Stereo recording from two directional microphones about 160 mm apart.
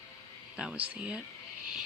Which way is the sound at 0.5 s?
5° right (ahead or behind).